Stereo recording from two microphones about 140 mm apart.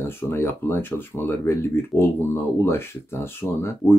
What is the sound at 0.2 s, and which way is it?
Speech, 15° left (ahead or behind).